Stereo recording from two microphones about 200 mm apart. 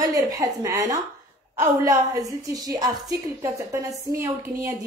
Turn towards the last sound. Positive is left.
turn(degrees=-15)  # may be behind; listen again after turning